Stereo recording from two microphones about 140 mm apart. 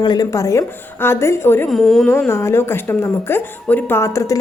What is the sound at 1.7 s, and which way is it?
Speech, centre (ahead or behind).